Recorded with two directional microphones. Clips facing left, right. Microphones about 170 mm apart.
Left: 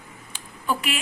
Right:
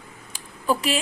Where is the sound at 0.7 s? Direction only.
30° right (ahead or behind).